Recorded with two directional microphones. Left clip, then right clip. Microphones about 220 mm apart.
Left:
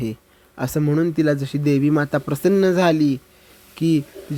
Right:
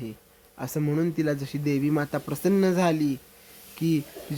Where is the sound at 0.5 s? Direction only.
25° left (ahead or behind).